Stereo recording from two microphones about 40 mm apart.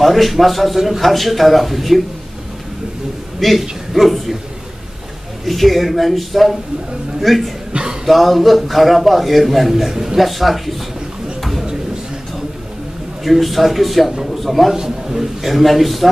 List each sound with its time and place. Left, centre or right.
0.0 s a man's voice: centre
3.3 s a man's voice: centre
5.4 s a man's voice: centre
7.7 s a sound: centre
8.0 s a man's voice: centre
13.2 s a man's voice: centre
14.8 s a man's voice: centre
15.5 s a man's voice: centre